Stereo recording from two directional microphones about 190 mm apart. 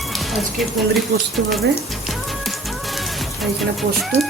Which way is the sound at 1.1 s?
70° right (ahead or behind).